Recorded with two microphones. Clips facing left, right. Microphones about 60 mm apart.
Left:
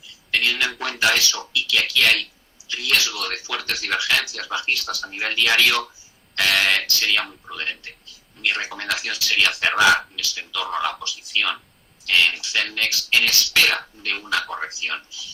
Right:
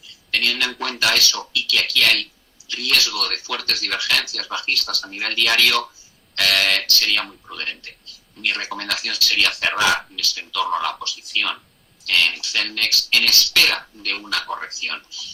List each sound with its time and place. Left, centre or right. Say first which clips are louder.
0.3 s speech: even; centre
2.6 s a sound: left 1 dB; left
3.0 s speech: right 2 dB; left
7.3 s speech: left 1 dB; centre
7.6 s speech: left 1 dB; centre
10.2 s speech: right 2 dB; left
10.7 s speech: right 2 dB; centre
12.0 s speech: left 1 dB; centre
14.4 s speech: right 1 dB; centre
14.7 s speech: left 1 dB; left